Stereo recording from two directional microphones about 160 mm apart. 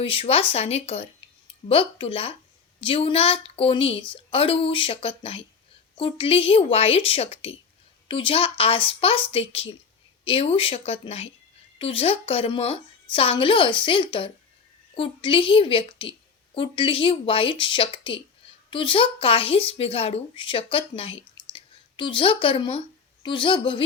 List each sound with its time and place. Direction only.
0.0 s speech: 35° left (ahead or behind)